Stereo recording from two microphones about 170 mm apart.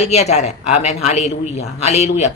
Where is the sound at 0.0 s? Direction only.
40° left (ahead or behind).